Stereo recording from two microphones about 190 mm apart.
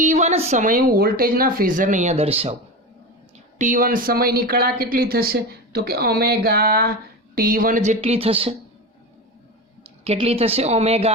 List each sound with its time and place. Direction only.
0.0 s speech: 40° right (ahead or behind)
3.6 s a woman's voice: 45° right (ahead or behind); by 8.5 s 30° right (ahead or behind)
10.0 s a woman's voice: 30° right (ahead or behind)